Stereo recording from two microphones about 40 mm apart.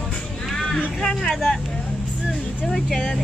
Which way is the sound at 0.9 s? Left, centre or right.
Centre.